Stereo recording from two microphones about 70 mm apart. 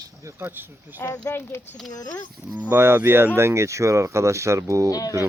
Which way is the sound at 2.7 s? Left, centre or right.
Right.